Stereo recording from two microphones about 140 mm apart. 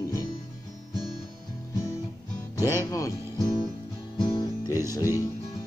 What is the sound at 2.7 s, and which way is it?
Speech, 20° left (ahead or behind).